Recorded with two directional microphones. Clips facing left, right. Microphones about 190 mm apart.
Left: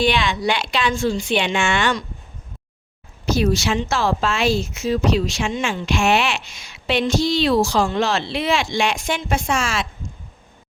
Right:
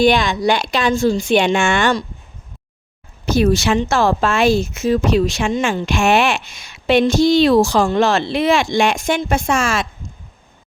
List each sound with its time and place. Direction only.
0.0 s speech: 45° right (ahead or behind)
3.3 s speech: 55° right (ahead or behind)